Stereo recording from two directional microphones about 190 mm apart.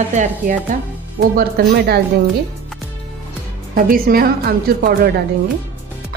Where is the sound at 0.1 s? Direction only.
40° right (ahead or behind).